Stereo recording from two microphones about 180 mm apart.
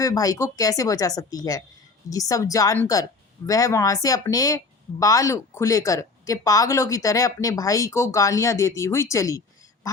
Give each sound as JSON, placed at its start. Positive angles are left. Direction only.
{"t": 0.0, "sound": "speech", "side_deg": 20}